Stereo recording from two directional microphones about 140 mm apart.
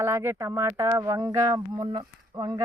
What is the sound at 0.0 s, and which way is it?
Speech, 15° right (ahead or behind).